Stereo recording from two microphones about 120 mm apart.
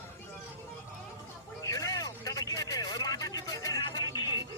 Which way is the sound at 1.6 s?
30° left (ahead or behind).